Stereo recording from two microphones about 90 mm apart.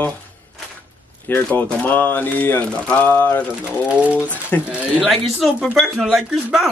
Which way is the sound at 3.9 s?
15° right (ahead or behind).